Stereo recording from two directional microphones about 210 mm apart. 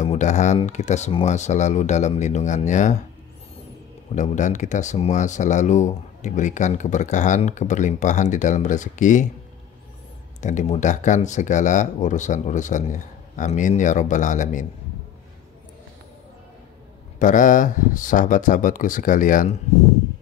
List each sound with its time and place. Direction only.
0.0 s speech: 35° left (ahead or behind)
4.1 s speech: 35° left (ahead or behind)
10.4 s speech: 35° left (ahead or behind)
17.2 s speech: 40° left (ahead or behind)